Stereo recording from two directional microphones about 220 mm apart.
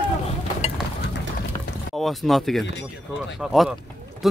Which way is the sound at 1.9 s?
Centre (ahead or behind).